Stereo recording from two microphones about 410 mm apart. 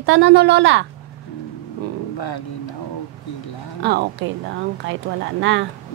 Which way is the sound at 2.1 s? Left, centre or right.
Left.